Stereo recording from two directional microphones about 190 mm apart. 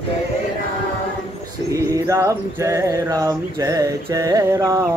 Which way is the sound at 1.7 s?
15° right (ahead or behind).